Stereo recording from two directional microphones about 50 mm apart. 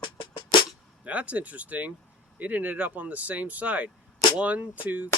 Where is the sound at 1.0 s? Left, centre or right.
Right.